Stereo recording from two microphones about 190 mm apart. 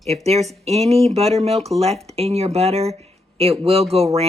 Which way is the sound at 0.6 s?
35° right (ahead or behind).